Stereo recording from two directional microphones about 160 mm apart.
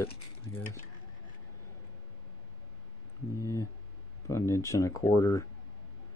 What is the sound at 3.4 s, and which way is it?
Speech, 20° left (ahead or behind).